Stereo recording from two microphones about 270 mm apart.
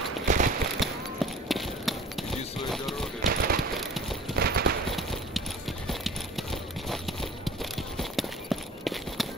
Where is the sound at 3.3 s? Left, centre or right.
Right.